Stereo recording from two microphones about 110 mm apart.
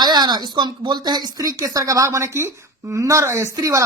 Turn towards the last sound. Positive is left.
turn(degrees=-30)  # may be behind; listen again after turning